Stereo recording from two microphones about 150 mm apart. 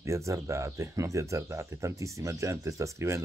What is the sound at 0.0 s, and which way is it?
Speech, 20° right (ahead or behind).